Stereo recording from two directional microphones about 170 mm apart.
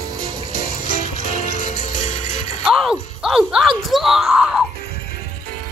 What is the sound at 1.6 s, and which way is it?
Music, 40° left (ahead or behind).